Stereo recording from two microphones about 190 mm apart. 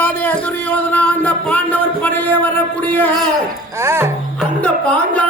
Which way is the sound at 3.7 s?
15° right (ahead or behind).